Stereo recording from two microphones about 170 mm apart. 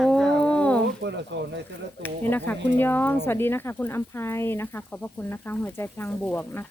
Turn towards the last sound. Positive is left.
turn(degrees=10)  # may be behind; listen again after turning